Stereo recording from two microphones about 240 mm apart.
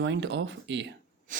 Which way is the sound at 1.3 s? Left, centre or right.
Right.